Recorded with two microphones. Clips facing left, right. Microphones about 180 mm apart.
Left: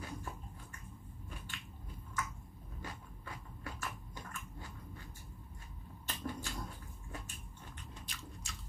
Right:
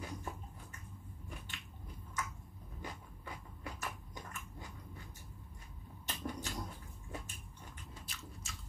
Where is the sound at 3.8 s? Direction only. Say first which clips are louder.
Even; 15° right (ahead or behind).